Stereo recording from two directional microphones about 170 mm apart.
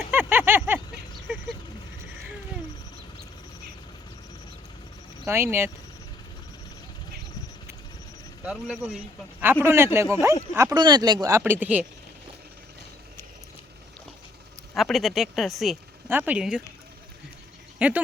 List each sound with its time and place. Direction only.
0.1 s a sound: 10° right (ahead or behind)
5.3 s speech: 15° right (ahead or behind)
8.4 s speech: 5° right (ahead or behind)
14.8 s speech: centre (ahead or behind)
16.0 s speech: 10° right (ahead or behind)
17.7 s speech: 10° right (ahead or behind)